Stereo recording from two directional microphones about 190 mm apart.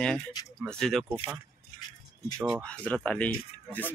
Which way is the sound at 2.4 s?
5° left (ahead or behind).